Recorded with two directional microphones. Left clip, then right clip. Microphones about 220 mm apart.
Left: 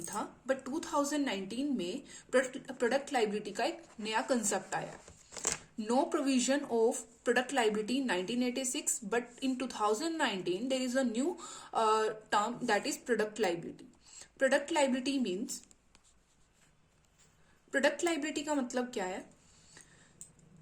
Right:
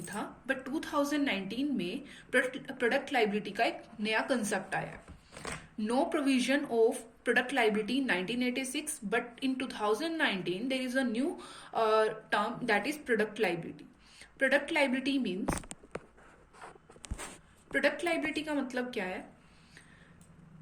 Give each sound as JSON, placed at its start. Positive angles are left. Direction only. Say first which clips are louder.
{"t": 0.0, "sound": "speech", "louder": "even", "side_deg": 20}
{"t": 17.7, "sound": "speech", "louder": "right 1 dB", "side_deg": 25}